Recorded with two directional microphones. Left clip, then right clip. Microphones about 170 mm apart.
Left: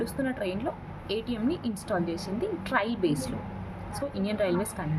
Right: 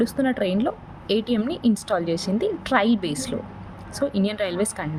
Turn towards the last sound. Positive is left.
turn(degrees=-50)  # may be behind; listen again after turning